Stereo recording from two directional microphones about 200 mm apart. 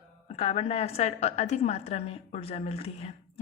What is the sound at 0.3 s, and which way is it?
A woman's voice, 30° left (ahead or behind).